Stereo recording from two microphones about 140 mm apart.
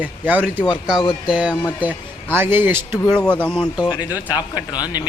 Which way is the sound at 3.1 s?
10° left (ahead or behind).